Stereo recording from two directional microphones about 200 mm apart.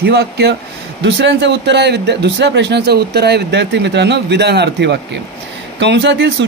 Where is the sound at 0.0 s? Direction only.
55° right (ahead or behind).